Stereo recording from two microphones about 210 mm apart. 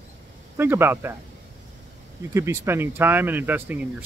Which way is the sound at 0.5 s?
10° right (ahead or behind).